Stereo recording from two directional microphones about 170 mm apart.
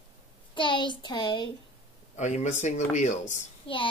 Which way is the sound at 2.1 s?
45° left (ahead or behind).